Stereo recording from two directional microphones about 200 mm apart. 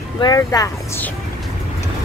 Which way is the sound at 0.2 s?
15° left (ahead or behind).